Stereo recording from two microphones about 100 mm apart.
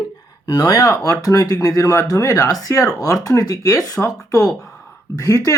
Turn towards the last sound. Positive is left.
turn(degrees=30)  # may be behind; listen again after turning